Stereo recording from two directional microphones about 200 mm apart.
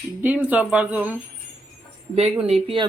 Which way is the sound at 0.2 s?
10° right (ahead or behind).